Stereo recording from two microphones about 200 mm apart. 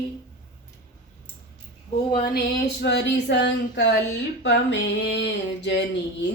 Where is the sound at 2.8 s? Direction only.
60° left (ahead or behind).